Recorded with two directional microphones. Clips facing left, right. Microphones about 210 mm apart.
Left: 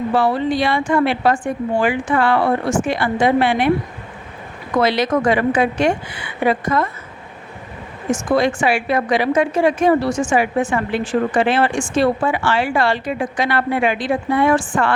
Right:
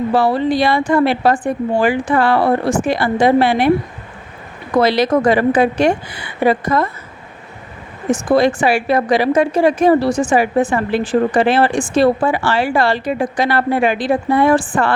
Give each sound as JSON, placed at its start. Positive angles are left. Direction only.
{"t": 0.1, "sound": "a woman's voice", "side_deg": -35}
{"t": 4.7, "sound": "a woman's voice", "side_deg": -35}
{"t": 8.1, "sound": "a woman's voice", "side_deg": -35}